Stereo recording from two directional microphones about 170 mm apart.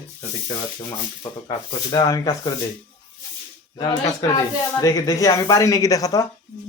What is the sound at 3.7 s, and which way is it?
Speech, 25° left (ahead or behind).